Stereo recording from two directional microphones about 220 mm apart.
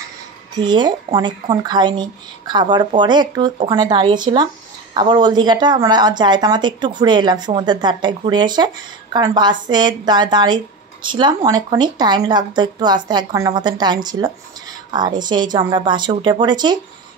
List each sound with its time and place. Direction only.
0.6 s speech: 20° right (ahead or behind)